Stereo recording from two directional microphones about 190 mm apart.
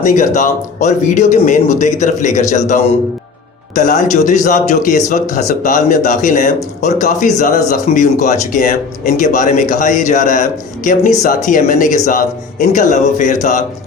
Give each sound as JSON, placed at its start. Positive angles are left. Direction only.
{"t": 0.0, "sound": "speech", "side_deg": 40}